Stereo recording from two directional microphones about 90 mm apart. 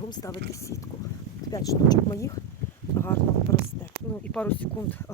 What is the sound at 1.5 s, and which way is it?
Speech, 45° left (ahead or behind).